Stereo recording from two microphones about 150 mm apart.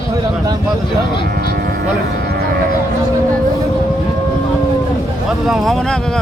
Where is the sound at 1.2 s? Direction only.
90° right.